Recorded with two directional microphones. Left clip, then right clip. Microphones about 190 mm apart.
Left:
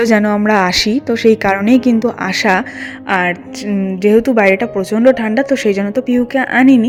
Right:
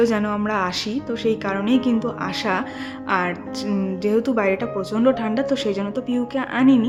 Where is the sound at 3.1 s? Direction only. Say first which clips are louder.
Left 7 dB; 25° left (ahead or behind).